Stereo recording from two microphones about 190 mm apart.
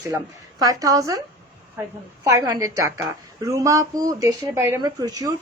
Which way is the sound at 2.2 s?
20° right (ahead or behind).